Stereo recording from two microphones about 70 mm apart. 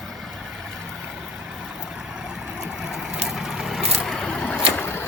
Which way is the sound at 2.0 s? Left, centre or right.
Centre.